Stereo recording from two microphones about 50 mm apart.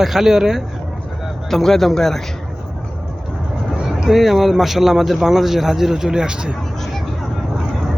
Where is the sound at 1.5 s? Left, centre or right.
Centre.